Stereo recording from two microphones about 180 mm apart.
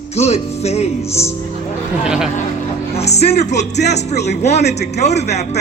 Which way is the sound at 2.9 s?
35° left (ahead or behind).